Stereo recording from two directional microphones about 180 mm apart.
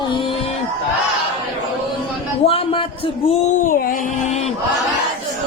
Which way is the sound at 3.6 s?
50° left (ahead or behind).